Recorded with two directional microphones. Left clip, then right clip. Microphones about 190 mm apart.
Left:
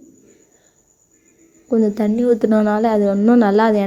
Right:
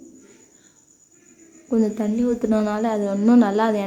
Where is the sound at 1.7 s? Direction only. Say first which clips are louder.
Left 5 dB; 25° left (ahead or behind).